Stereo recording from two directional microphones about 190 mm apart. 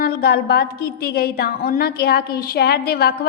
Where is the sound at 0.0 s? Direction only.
55° left (ahead or behind).